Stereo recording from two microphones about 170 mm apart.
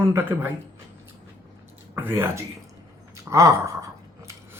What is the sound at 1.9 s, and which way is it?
Speech, 15° right (ahead or behind).